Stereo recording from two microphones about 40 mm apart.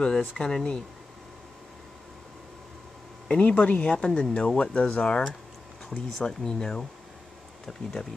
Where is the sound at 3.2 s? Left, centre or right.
Left.